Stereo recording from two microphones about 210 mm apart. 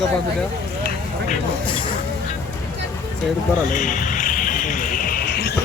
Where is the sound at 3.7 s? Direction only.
40° left (ahead or behind).